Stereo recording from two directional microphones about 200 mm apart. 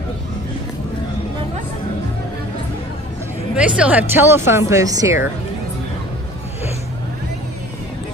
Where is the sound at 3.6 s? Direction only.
5° right (ahead or behind).